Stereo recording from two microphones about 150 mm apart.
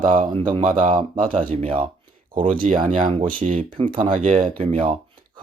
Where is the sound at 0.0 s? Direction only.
60° right (ahead or behind).